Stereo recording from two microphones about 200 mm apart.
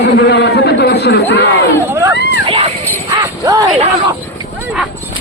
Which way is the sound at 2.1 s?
55° left (ahead or behind).